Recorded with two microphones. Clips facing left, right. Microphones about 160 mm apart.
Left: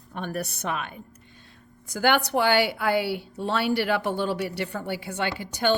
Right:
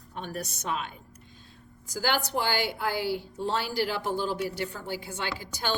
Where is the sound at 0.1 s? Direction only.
60° left (ahead or behind).